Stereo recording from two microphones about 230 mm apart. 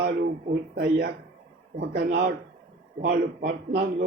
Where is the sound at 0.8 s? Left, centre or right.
Right.